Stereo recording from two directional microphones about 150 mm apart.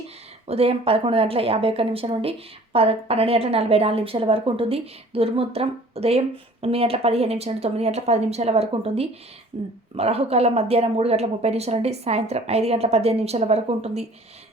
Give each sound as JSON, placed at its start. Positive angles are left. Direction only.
{"t": 0.4, "sound": "a woman's voice", "side_deg": -40}